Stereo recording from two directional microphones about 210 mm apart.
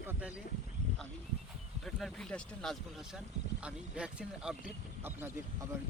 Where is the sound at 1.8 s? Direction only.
Centre (ahead or behind).